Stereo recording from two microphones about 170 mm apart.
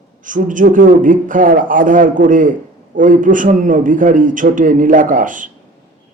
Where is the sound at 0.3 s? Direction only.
50° right (ahead or behind).